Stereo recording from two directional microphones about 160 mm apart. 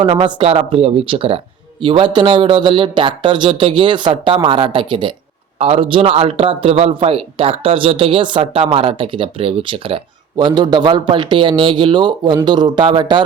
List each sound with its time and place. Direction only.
0.0 s a man's voice: 30° right (ahead or behind)